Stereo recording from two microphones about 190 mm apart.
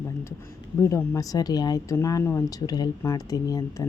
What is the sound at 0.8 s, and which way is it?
A woman's voice, 15° left (ahead or behind).